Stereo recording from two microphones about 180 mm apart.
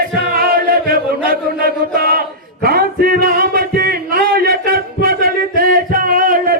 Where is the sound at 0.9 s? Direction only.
55° right (ahead or behind).